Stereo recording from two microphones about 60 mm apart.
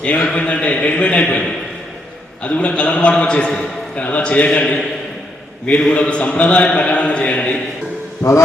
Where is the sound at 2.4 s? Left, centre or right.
Left.